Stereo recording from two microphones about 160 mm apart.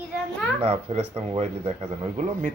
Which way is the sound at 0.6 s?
40° right (ahead or behind).